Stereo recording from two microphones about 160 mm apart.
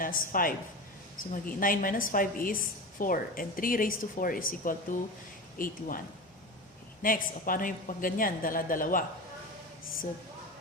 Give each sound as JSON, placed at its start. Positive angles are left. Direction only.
{"t": 0.0, "sound": "a woman's voice", "side_deg": 60}
{"t": 7.0, "sound": "a woman's voice", "side_deg": 60}